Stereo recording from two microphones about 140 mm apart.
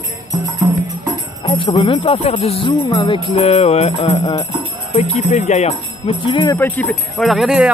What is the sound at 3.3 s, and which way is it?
Speech, 45° left (ahead or behind).